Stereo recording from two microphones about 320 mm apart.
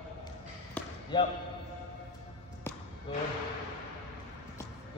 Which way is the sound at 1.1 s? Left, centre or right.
Centre.